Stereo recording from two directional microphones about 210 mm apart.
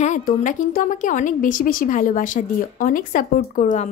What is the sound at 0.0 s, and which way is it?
A woman's voice, 40° left (ahead or behind).